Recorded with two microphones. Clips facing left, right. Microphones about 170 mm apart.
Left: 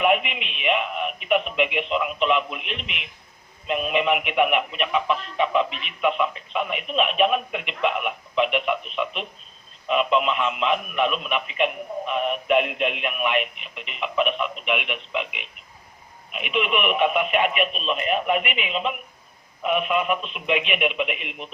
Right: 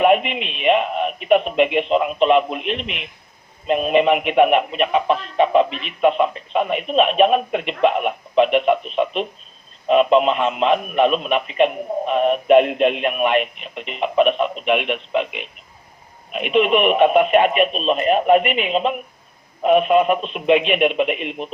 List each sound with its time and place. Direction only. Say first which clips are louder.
0.0 s speech: right 6 dB; 40° right (ahead or behind)